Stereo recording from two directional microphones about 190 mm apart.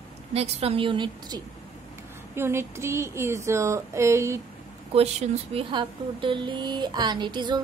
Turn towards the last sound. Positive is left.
turn(degrees=-25)  # may be behind; listen again after turning